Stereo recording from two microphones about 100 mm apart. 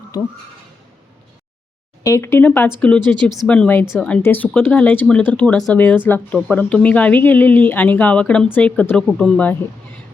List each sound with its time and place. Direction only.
2.0 s a woman's voice: 30° left (ahead or behind); by 9.6 s 15° left (ahead or behind)